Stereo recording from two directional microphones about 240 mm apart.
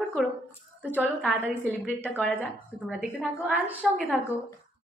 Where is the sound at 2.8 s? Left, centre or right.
Centre.